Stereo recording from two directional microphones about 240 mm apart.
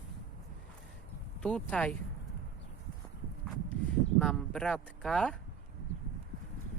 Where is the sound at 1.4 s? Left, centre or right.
Centre.